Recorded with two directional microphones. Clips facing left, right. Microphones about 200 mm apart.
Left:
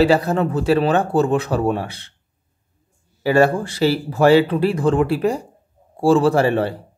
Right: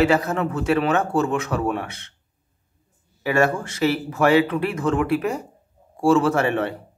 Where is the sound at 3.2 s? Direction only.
30° left (ahead or behind).